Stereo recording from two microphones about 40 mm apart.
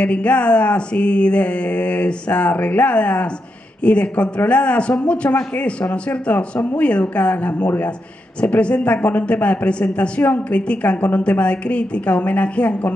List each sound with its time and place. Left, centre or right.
0.0 s a man's voice: left